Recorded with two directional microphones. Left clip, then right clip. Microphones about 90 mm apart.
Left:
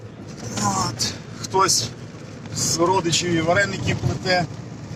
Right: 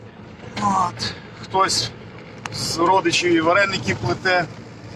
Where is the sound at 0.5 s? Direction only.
35° right (ahead or behind).